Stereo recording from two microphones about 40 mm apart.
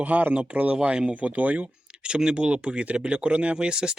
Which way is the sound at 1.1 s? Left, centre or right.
Right.